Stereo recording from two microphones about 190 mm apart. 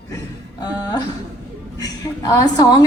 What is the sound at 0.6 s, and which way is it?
Speech, 20° left (ahead or behind).